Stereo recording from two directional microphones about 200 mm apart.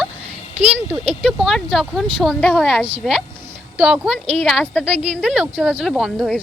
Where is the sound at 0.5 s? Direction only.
30° right (ahead or behind).